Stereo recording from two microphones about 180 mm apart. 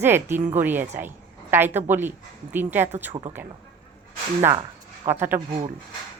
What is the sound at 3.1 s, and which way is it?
Speech, 30° right (ahead or behind).